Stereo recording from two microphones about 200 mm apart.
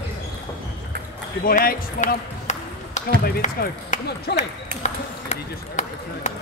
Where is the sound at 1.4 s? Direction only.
45° left (ahead or behind).